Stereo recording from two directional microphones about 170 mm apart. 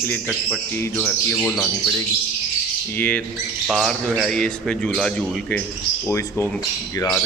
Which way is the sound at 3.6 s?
Centre (ahead or behind).